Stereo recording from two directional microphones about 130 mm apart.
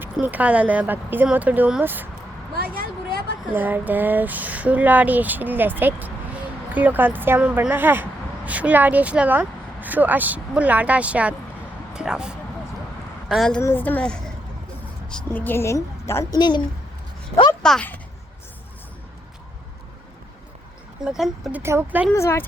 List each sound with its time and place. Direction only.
0.0 s speech: 15° right (ahead or behind)
3.5 s a woman's voice: 15° right (ahead or behind); by 13.6 s centre (ahead or behind)
13.6 s a woman's voice: 15° left (ahead or behind)
16.4 s a woman's voice: 35° left (ahead or behind)
17.6 s speech: 5° left (ahead or behind)
21.0 s speech: 5° right (ahead or behind)
21.6 s speech: 20° right (ahead or behind)
22.1 s speech: 20° left (ahead or behind)